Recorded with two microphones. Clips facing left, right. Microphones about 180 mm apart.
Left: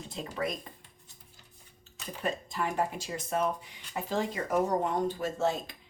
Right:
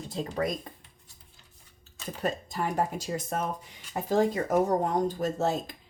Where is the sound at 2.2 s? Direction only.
40° right (ahead or behind).